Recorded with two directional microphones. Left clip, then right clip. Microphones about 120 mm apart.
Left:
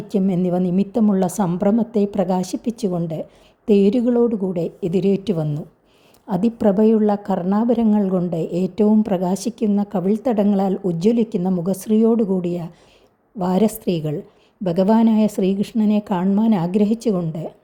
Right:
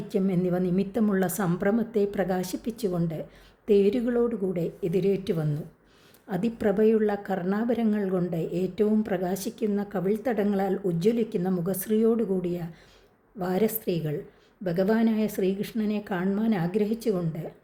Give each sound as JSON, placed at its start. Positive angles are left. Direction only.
{"t": 0.1, "sound": "a woman's voice", "side_deg": 45}